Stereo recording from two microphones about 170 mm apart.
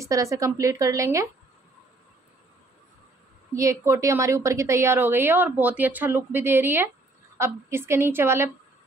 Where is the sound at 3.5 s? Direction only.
20° right (ahead or behind).